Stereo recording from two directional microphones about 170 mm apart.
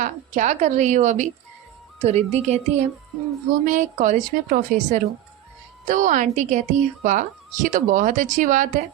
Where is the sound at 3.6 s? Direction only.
50° right (ahead or behind).